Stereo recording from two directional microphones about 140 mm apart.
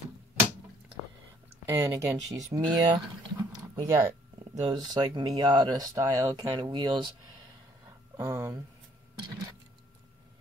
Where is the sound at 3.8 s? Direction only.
25° right (ahead or behind).